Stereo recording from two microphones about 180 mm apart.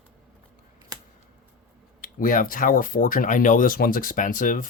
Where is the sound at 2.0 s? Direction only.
50° left (ahead or behind).